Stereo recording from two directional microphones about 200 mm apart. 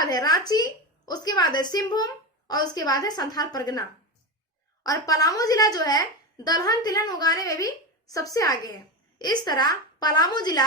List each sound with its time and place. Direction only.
0.0 s a woman's voice: 20° left (ahead or behind)